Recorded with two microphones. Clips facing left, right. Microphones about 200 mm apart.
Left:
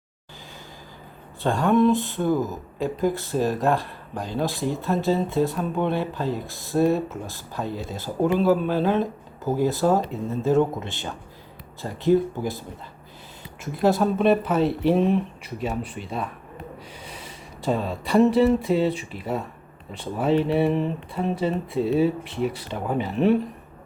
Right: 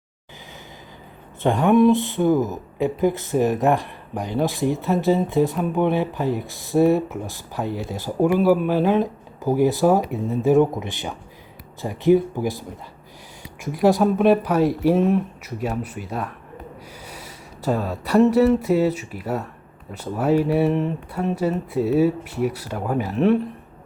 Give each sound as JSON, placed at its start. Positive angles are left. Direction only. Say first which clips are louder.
{"t": 1.4, "sound": "speech", "louder": "right 3 dB", "side_deg": -20}
{"t": 13.6, "sound": "speech", "louder": "right 3 dB", "side_deg": -15}
{"t": 17.1, "sound": "a sound", "louder": "right 1 dB", "side_deg": -10}
{"t": 19.9, "sound": "speech", "louder": "right 2 dB", "side_deg": -10}